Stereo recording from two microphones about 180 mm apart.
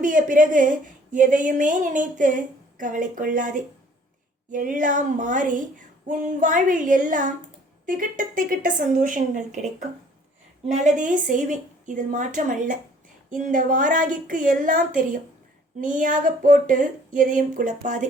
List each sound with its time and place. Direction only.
0.0 s a woman's voice: 45° right (ahead or behind)